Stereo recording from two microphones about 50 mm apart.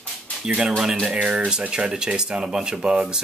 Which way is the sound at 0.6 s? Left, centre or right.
Centre.